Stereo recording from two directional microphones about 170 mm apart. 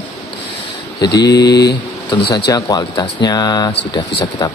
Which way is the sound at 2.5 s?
25° left (ahead or behind).